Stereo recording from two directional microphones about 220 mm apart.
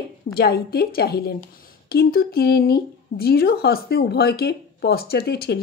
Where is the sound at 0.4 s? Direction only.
45° left (ahead or behind).